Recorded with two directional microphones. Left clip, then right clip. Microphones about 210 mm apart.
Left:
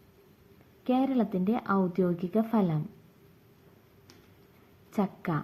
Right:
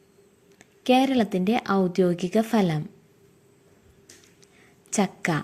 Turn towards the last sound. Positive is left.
turn(degrees=-30)  # may be behind; listen again after turning